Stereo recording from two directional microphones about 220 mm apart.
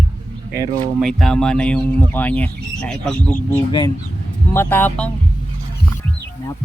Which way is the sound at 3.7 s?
20° left (ahead or behind).